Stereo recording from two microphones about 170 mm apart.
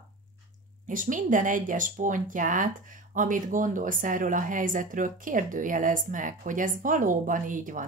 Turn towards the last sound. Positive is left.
turn(degrees=-50)  # may be behind; listen again after turning